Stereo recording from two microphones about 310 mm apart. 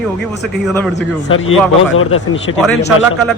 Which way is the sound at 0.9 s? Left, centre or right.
Left.